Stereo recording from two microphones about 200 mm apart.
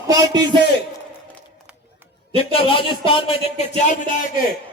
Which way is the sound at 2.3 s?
30° left (ahead or behind).